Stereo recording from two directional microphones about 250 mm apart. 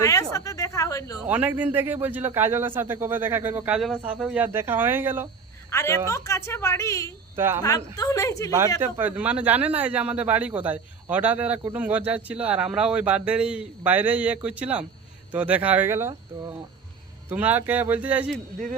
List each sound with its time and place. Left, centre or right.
0.0 s a sound: centre
1.3 s a man's voice: centre
5.7 s a woman's voice: centre
7.3 s a man's voice: centre
7.6 s a woman's voice: centre
8.8 s a man's voice: centre